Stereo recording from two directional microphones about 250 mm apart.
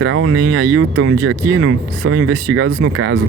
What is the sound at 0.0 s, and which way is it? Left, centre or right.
Speech, right.